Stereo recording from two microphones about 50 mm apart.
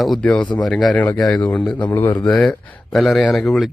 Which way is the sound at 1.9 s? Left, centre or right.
Left.